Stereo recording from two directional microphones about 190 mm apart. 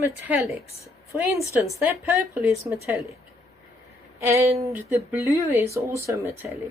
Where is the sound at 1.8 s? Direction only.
10° right (ahead or behind).